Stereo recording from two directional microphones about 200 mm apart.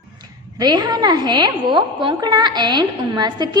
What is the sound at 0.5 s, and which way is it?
A woman's voice, 20° right (ahead or behind).